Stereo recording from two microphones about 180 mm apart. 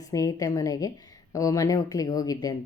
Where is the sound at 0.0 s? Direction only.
20° left (ahead or behind).